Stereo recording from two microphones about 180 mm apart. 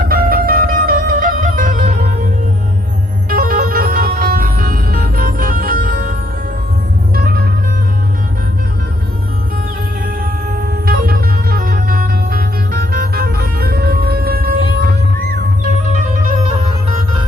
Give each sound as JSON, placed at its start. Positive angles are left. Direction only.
{"t": 0.1, "sound": "music", "side_deg": -55}
{"t": 3.2, "sound": "music", "side_deg": -50}
{"t": 10.8, "sound": "music", "side_deg": -55}